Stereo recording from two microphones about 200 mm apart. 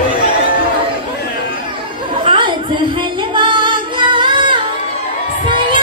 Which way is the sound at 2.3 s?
25° right (ahead or behind).